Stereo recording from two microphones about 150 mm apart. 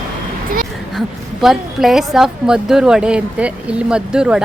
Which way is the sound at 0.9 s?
Centre (ahead or behind).